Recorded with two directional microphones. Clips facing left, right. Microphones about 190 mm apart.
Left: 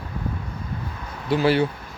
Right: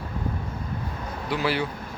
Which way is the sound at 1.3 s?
30° left (ahead or behind).